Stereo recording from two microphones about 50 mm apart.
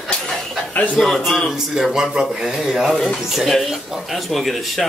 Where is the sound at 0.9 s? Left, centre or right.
Centre.